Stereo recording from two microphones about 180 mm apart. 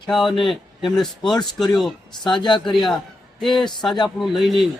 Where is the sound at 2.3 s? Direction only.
25° left (ahead or behind).